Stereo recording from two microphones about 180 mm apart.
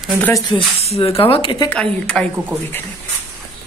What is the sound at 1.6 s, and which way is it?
Speech, 5° left (ahead or behind).